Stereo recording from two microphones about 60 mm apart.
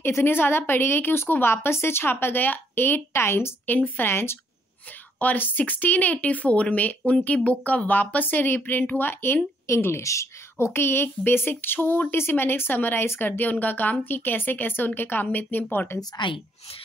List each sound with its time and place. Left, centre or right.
0.0 s a woman's voice: left
5.2 s a woman's voice: left
10.0 s speech: left
10.7 s a woman's voice: left